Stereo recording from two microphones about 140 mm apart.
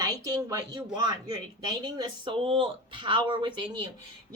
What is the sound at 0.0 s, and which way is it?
Speech, 25° right (ahead or behind).